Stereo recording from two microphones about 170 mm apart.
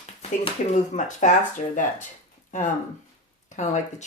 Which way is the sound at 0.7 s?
45° left (ahead or behind).